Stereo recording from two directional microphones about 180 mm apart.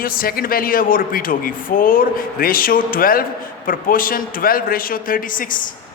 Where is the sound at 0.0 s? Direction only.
55° left (ahead or behind).